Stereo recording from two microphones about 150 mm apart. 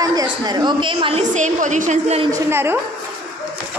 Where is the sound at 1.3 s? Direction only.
55° right (ahead or behind).